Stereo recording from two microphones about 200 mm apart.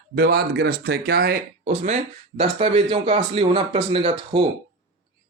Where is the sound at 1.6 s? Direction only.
35° right (ahead or behind).